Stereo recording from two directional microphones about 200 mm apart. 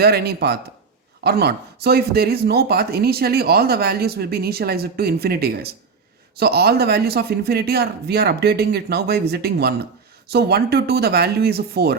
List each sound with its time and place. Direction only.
0.0 s speech: 50° right (ahead or behind)